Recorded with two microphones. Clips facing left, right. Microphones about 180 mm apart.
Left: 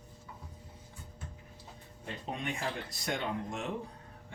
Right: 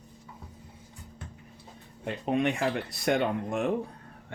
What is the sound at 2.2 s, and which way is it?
Speech, 70° right (ahead or behind).